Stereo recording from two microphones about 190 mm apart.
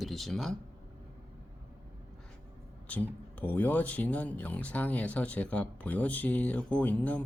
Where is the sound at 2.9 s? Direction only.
5° left (ahead or behind).